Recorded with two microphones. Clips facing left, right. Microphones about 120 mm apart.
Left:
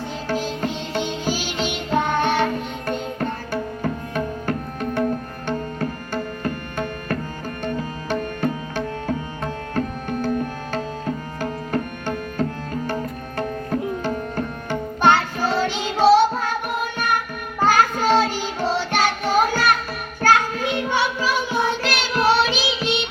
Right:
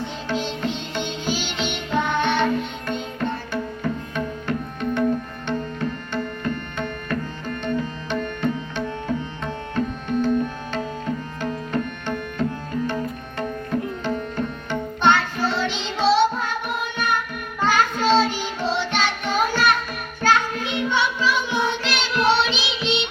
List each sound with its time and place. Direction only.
0.3 s music: 40° left (ahead or behind)
6.4 s tabla: 40° left (ahead or behind)
7.6 s music: 40° left (ahead or behind)
11.3 s tabla: 40° left (ahead or behind)
15.4 s music: 45° left (ahead or behind)